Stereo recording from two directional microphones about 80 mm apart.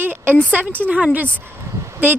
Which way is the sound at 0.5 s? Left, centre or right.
Right.